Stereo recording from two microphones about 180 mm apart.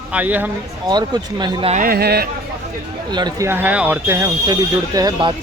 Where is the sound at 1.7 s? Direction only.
50° right (ahead or behind).